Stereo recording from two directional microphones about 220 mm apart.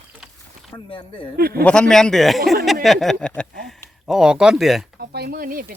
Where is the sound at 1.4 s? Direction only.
45° right (ahead or behind).